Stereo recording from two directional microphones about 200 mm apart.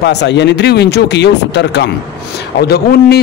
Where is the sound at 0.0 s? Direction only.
60° left (ahead or behind).